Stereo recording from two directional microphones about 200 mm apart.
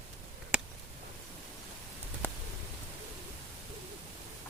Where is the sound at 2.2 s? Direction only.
10° left (ahead or behind).